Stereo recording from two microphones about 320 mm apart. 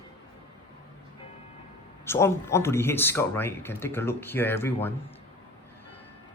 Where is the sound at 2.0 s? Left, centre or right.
Centre.